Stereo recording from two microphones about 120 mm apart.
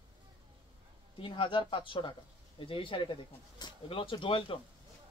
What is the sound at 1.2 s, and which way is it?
Speech, 45° left (ahead or behind).